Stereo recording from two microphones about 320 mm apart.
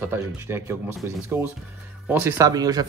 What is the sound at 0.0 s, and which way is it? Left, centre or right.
Speech, centre.